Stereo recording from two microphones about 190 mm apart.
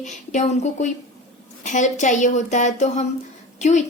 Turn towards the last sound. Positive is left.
turn(degrees=40)  # may be behind; listen again after turning